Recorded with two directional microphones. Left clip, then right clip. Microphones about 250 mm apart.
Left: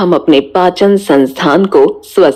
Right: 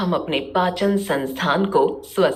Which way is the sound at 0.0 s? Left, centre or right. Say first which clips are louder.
Left 14 dB; centre.